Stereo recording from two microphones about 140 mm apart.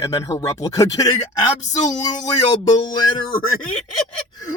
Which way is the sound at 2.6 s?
30° left (ahead or behind).